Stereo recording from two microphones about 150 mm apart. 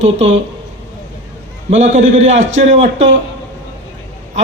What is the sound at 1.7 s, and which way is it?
Speech, 50° right (ahead or behind).